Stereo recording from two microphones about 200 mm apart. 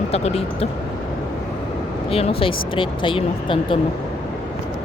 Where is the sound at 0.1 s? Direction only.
30° left (ahead or behind).